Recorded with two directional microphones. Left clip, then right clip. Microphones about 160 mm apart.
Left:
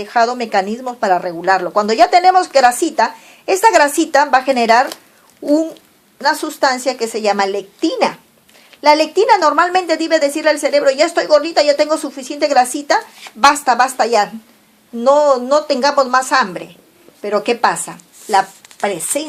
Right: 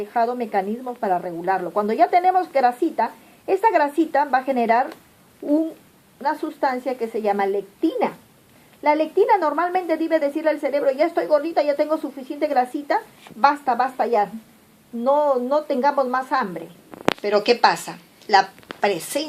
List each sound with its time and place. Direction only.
0.0 s a woman's voice: 35° left (ahead or behind)
6.2 s a woman's voice: 35° left (ahead or behind)
17.2 s speech: 25° left (ahead or behind)